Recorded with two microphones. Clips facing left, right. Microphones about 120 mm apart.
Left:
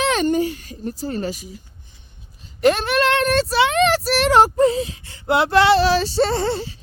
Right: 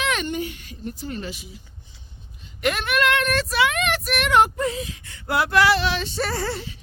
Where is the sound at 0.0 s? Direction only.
35° left (ahead or behind).